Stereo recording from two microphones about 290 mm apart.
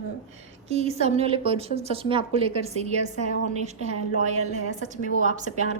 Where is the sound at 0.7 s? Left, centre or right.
Right.